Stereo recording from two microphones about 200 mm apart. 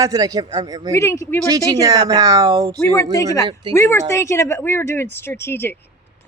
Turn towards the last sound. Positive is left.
turn(degrees=10)  # may be behind; listen again after turning